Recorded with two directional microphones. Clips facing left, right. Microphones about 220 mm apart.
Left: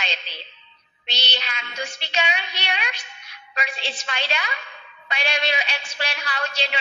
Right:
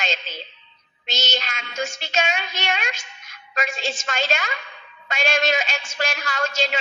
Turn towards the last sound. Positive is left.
turn(degrees=-45)  # may be behind; listen again after turning